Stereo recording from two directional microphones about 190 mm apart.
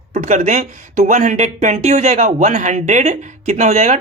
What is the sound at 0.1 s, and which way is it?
Speech, 35° right (ahead or behind).